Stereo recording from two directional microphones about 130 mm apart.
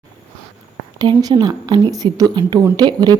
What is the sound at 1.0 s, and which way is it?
A woman's voice, 35° right (ahead or behind).